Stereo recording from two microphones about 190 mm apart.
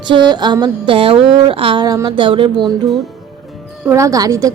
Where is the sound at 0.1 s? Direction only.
25° right (ahead or behind).